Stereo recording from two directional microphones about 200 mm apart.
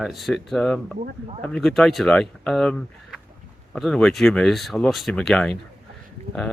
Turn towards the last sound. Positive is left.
turn(degrees=5)  # may be behind; listen again after turning